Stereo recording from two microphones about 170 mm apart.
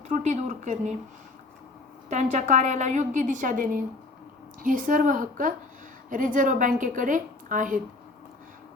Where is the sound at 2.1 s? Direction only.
40° right (ahead or behind).